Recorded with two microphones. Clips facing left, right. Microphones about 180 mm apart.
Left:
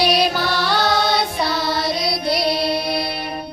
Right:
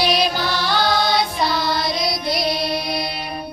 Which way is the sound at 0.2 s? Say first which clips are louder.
Left 2 dB; 65° left (ahead or behind).